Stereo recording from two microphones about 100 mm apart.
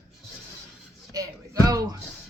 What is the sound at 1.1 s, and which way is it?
Music, 35° right (ahead or behind).